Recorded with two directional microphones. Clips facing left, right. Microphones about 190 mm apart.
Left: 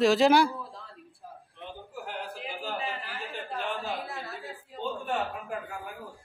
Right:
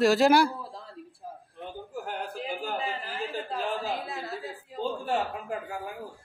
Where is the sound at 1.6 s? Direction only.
45° right (ahead or behind).